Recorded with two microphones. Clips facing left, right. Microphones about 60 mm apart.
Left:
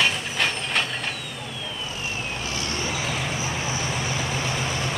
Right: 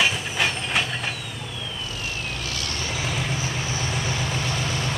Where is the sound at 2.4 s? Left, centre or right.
Left.